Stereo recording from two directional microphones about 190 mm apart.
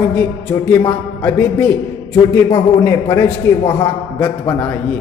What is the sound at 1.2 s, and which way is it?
Speech, 10° left (ahead or behind).